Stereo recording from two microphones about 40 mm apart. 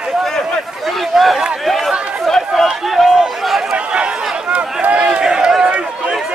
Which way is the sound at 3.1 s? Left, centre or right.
Centre.